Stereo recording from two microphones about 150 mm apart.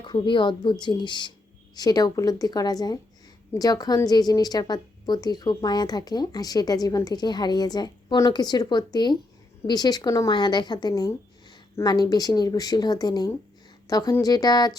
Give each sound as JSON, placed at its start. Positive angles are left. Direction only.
{"t": 0.0, "sound": "a woman's voice", "side_deg": 30}